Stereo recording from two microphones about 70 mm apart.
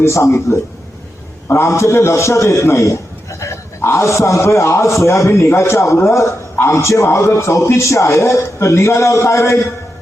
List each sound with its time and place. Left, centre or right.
0.0 s a man's voice: left
1.5 s a man's voice: left